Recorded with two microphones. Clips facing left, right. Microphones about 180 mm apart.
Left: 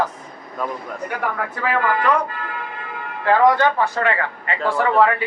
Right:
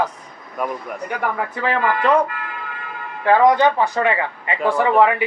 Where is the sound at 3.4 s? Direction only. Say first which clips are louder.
Even; 15° right (ahead or behind).